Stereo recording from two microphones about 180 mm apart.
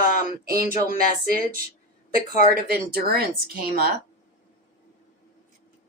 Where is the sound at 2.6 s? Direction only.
55° right (ahead or behind).